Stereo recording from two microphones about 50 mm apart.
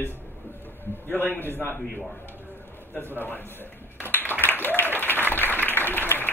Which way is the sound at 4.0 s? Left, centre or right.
Left.